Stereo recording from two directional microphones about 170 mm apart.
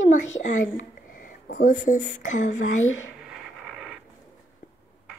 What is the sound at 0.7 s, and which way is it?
Speech, 50° left (ahead or behind).